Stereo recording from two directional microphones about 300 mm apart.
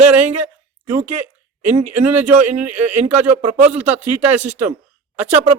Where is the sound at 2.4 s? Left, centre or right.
Right.